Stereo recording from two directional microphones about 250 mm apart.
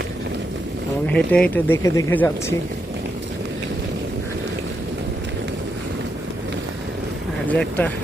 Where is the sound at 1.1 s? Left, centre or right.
Centre.